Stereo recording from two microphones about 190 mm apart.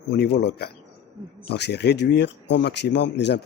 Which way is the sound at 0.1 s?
60° left (ahead or behind).